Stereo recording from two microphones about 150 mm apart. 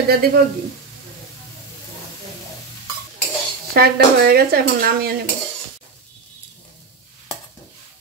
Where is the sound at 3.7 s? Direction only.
90° right.